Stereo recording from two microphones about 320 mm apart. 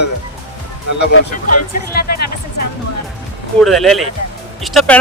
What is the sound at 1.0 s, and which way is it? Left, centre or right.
Speech, left.